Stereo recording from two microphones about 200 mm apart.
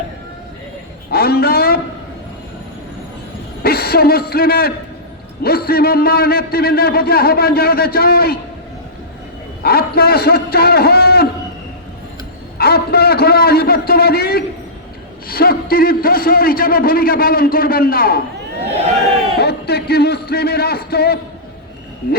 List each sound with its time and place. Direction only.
1.1 s a sound: 50° left (ahead or behind)
3.6 s a man's voice: 50° left (ahead or behind)
9.6 s a man's voice: 50° left (ahead or behind)
12.5 s a man's voice: 50° left (ahead or behind)
19.4 s a man's voice: 55° left (ahead or behind)